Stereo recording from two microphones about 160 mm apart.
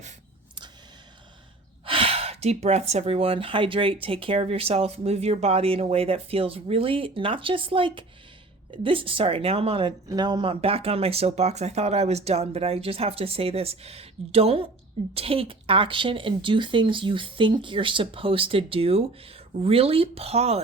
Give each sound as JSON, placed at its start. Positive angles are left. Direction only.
{"t": 1.8, "sound": "speech", "side_deg": -35}